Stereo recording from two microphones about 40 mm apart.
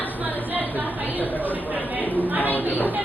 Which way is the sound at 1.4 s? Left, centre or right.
Right.